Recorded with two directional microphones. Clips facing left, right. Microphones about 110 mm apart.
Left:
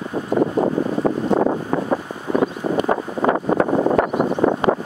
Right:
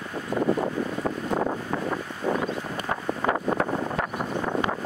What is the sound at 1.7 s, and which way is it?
Wind, 35° left (ahead or behind).